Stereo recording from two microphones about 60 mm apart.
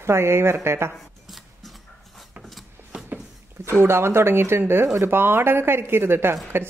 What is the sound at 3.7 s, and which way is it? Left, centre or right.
Speech, right.